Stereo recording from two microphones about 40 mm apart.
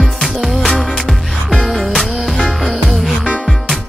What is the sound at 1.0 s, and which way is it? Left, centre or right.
Music, centre.